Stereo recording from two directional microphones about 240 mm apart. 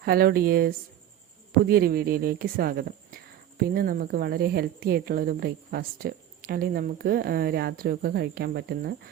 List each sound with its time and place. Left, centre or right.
0.0 s speech: right